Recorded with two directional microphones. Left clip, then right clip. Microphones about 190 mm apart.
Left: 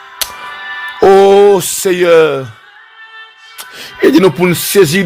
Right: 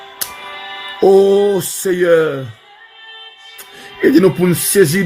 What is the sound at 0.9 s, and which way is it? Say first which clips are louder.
Music: left 4 dB; 35° left (ahead or behind).